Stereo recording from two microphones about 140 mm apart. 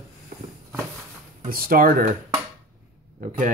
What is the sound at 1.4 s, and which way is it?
Speech, 90° right.